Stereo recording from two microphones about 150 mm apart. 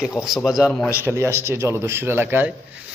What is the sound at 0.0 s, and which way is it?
Speech, 5° right (ahead or behind).